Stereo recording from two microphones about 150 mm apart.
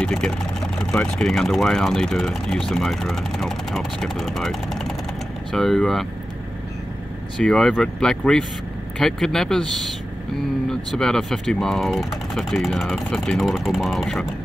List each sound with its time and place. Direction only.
0.0 s speech: 5° left (ahead or behind)
7.3 s speech: 5° left (ahead or behind)